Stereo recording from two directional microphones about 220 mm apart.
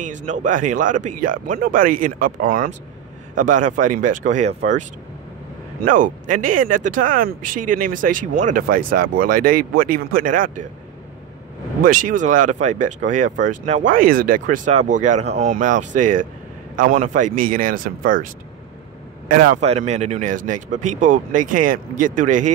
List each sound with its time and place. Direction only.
0.0 s speech: 35° right (ahead or behind)
5.9 s speech: 35° right (ahead or behind)
11.8 s speech: 40° right (ahead or behind)